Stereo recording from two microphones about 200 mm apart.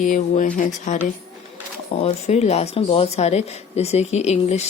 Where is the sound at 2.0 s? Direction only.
30° left (ahead or behind).